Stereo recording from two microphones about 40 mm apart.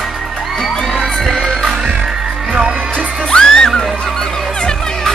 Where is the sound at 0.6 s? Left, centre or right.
Centre.